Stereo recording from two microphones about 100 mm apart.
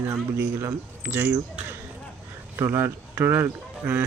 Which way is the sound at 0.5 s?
25° right (ahead or behind).